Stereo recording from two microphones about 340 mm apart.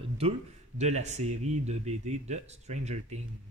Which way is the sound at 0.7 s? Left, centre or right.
Centre.